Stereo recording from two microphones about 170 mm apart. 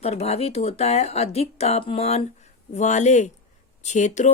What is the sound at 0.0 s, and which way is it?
Speech, 35° left (ahead or behind).